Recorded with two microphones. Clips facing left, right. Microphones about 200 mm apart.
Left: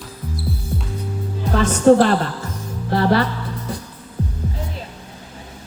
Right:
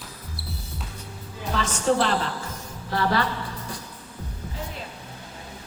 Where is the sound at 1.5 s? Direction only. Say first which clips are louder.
Left 10 dB; 50° left (ahead or behind).